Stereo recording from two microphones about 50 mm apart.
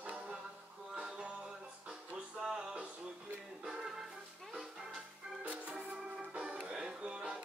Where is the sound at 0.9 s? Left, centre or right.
Centre.